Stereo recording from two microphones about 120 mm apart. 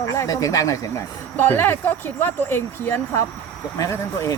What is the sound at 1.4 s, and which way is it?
Speech, 15° left (ahead or behind).